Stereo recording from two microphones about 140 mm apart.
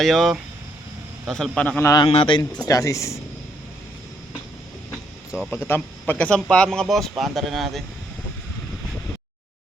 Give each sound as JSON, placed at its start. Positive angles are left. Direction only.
{"t": 0.0, "sound": "speech", "side_deg": 0}
{"t": 2.0, "sound": "speech", "side_deg": 40}
{"t": 2.6, "sound": "speech", "side_deg": 25}
{"t": 5.3, "sound": "speech", "side_deg": -5}
{"t": 5.6, "sound": "speech", "side_deg": 15}